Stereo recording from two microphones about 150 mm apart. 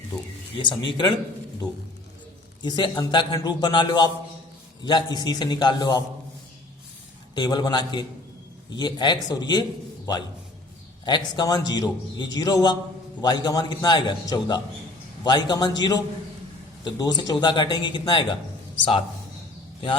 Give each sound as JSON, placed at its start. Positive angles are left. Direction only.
{"t": 0.5, "sound": "speech", "side_deg": 30}
{"t": 2.6, "sound": "a man's voice", "side_deg": 30}
{"t": 7.3, "sound": "a man's voice", "side_deg": 30}